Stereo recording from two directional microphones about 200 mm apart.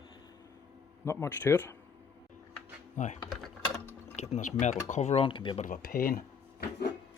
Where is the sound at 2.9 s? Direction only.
35° left (ahead or behind).